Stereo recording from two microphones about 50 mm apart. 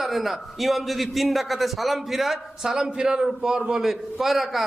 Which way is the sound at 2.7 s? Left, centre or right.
Centre.